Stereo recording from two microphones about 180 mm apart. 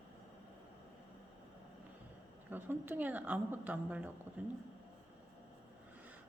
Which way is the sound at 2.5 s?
10° right (ahead or behind).